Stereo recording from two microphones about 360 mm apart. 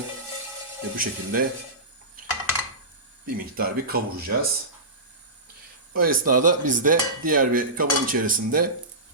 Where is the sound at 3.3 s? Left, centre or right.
Right.